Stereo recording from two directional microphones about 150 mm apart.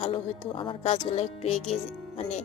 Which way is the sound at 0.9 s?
45° left (ahead or behind).